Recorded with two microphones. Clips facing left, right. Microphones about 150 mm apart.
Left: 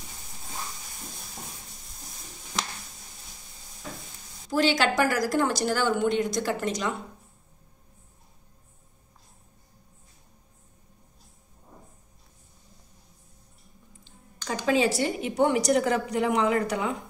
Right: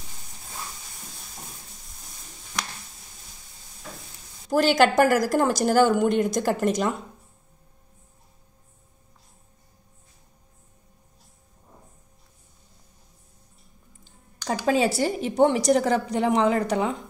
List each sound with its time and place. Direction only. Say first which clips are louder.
4.5 s speech: right 5 dB; 45° right (ahead or behind)
14.7 s a woman's voice: right 2 dB; 35° right (ahead or behind)